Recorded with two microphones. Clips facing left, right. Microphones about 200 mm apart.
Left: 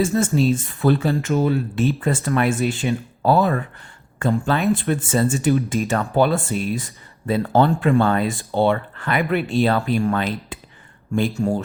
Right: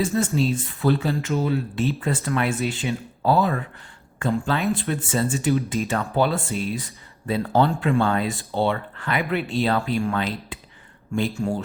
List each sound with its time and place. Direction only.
0.0 s speech: 45° left (ahead or behind)